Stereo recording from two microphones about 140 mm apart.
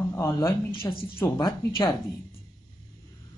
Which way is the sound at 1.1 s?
25° left (ahead or behind).